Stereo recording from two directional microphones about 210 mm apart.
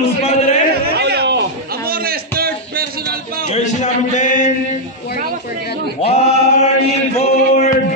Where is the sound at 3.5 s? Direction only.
35° left (ahead or behind).